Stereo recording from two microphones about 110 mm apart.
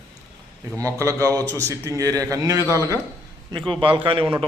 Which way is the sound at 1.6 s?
25° right (ahead or behind).